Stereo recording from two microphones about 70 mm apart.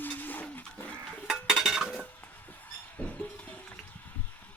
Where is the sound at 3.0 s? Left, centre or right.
Left.